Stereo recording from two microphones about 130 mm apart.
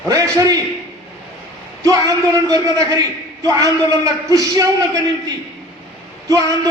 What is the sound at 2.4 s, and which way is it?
Speech, 30° right (ahead or behind).